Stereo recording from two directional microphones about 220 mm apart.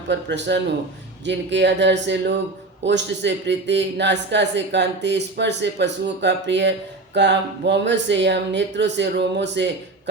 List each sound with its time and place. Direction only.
0.1 s a man's voice: 55° right (ahead or behind)